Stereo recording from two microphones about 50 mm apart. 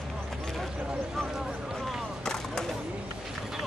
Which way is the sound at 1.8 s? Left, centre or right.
Centre.